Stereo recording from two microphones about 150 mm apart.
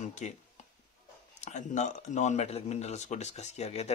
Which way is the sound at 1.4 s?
55° left (ahead or behind).